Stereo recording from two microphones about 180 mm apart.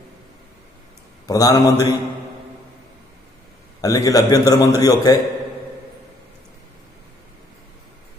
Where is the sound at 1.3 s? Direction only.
20° left (ahead or behind).